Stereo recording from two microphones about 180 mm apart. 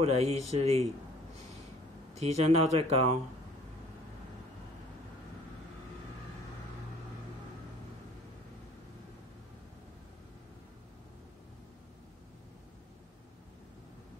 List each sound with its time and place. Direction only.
0.0 s speech: 35° right (ahead or behind)
2.1 s speech: 35° right (ahead or behind)